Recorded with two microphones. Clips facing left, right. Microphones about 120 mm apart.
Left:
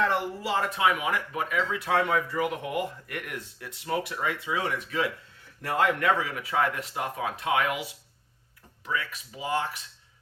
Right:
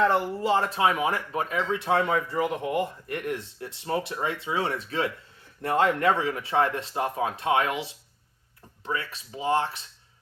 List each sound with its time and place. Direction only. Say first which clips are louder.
0.0 s speech: right 4 dB; 25° right (ahead or behind)